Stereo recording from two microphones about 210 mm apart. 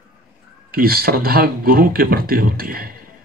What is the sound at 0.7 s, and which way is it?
Speech, 45° right (ahead or behind).